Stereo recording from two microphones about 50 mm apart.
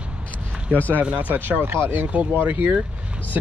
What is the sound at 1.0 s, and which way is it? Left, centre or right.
Speech, right.